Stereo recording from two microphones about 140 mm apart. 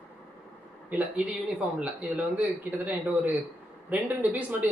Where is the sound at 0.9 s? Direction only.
10° right (ahead or behind).